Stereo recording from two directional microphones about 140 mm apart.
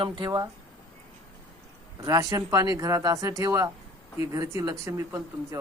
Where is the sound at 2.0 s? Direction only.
25° right (ahead or behind).